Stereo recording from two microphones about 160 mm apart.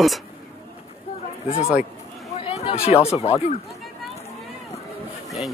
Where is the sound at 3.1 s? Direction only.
35° left (ahead or behind).